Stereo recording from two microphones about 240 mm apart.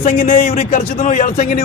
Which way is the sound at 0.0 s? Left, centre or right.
Left.